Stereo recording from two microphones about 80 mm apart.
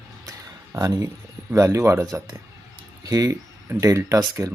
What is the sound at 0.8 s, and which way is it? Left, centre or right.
Speech, right.